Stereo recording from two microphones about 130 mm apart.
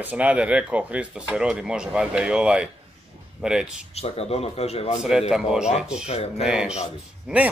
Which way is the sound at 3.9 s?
50° left (ahead or behind).